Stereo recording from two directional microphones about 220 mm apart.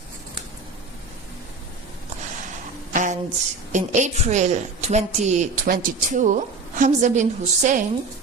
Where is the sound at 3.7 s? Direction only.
35° right (ahead or behind).